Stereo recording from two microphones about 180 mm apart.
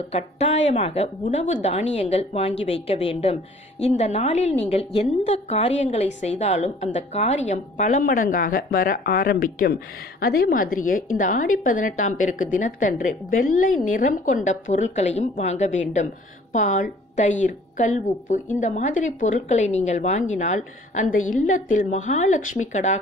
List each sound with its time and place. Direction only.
0.1 s a woman's voice: 35° left (ahead or behind)